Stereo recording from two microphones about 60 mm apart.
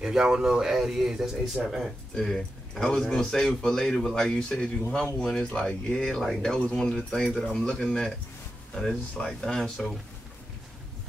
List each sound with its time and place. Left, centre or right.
0.0 s speech: centre
2.1 s speech: centre
6.6 s speech: centre
6.9 s speech: centre
9.1 s speech: centre